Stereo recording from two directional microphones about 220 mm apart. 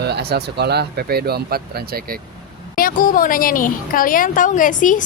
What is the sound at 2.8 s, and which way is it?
A woman's voice, 40° left (ahead or behind).